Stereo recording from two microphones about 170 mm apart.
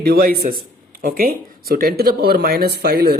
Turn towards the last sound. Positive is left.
turn(degrees=-70)  # may be behind; listen again after turning